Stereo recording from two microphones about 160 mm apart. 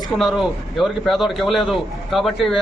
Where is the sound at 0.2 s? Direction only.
Centre (ahead or behind).